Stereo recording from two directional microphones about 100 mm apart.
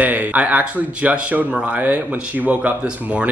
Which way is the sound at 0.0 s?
15° right (ahead or behind).